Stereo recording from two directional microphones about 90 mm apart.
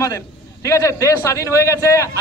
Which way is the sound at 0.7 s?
35° left (ahead or behind).